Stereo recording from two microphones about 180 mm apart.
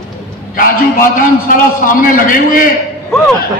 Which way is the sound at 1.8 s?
50° left (ahead or behind).